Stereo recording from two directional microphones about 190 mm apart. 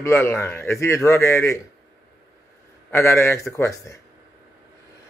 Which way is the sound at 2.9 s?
15° left (ahead or behind).